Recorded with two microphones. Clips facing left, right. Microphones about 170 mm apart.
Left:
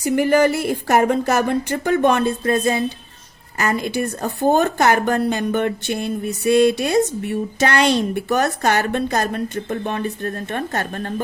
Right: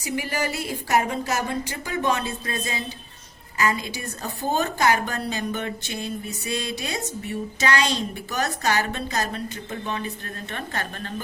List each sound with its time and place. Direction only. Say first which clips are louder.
0.0 s a woman's voice: left 12 dB; 55° left (ahead or behind)